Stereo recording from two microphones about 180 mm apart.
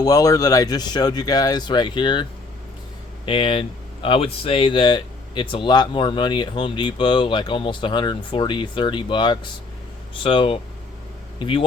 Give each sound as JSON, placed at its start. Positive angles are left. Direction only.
{"t": 0.0, "sound": "speech", "side_deg": 20}
{"t": 3.2, "sound": "speech", "side_deg": 30}